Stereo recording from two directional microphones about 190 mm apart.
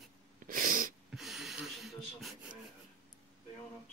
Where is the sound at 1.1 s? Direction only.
Centre (ahead or behind).